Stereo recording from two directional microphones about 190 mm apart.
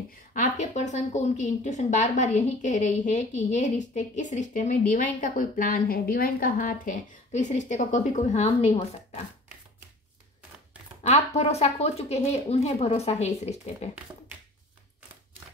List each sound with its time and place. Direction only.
0.3 s a woman's voice: 40° left (ahead or behind)
11.0 s a woman's voice: 35° left (ahead or behind)